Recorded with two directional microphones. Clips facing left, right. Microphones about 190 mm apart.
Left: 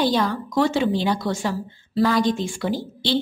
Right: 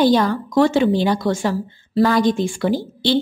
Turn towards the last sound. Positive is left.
turn(degrees=-50)  # may be behind; listen again after turning